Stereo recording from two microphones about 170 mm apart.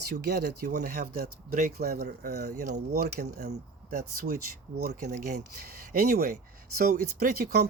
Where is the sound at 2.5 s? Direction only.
45° right (ahead or behind).